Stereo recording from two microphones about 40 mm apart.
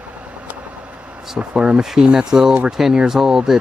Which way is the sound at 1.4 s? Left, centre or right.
Right.